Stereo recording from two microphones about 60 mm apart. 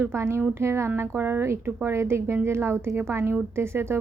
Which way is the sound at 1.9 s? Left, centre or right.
Right.